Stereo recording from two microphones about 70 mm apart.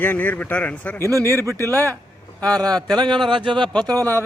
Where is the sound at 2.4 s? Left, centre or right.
Centre.